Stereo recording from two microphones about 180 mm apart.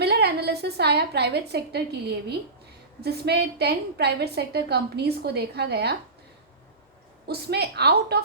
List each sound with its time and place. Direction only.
0.0 s a sound: 65° right (ahead or behind)
3.0 s a woman's voice: 65° right (ahead or behind)
7.3 s a woman's voice: 65° right (ahead or behind)